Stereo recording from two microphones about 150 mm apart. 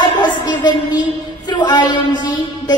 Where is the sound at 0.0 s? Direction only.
30° left (ahead or behind).